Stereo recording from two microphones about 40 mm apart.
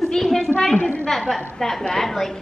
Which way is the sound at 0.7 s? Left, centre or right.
Left.